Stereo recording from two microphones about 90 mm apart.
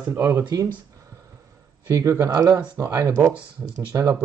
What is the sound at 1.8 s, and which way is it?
Speech, 35° right (ahead or behind).